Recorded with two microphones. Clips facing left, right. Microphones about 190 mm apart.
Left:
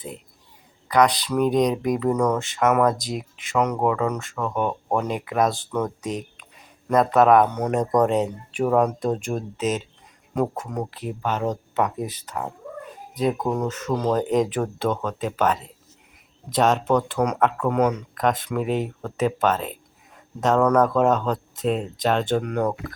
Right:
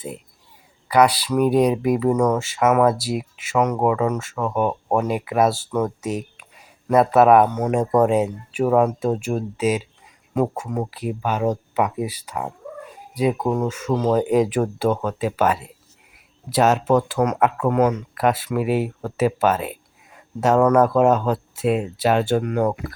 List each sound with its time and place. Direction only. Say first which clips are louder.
0.9 s speech: right 2 dB; 10° right (ahead or behind)